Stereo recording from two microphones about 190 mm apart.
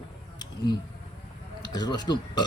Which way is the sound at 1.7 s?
20° left (ahead or behind).